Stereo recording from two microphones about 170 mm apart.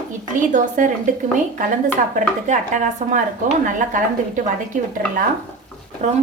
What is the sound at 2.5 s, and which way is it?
A woman's voice, 45° right (ahead or behind).